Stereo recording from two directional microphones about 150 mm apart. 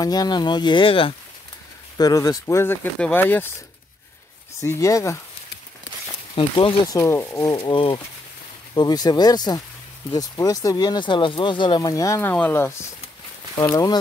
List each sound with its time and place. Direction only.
0.0 s speech: 25° left (ahead or behind)
2.0 s speech: 25° left (ahead or behind)
4.6 s speech: 20° left (ahead or behind)
6.3 s speech: 35° left (ahead or behind); by 7.5 s 15° left (ahead or behind)
7.5 s speech: 35° left (ahead or behind); by 12.8 s 15° left (ahead or behind)